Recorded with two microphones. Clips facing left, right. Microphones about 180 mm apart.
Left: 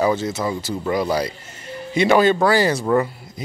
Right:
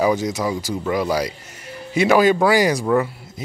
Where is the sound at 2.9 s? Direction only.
Centre (ahead or behind).